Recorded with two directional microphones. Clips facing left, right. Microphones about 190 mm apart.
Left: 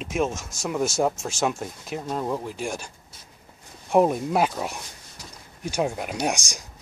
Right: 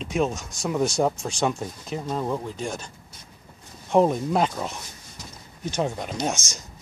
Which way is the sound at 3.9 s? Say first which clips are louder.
Even; 5° left (ahead or behind).